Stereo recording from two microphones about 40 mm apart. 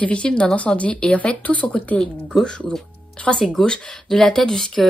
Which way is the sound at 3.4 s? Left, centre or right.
Centre.